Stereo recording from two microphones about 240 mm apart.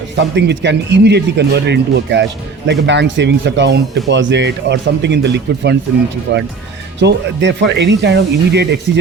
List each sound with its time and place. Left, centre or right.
0.2 s speech: right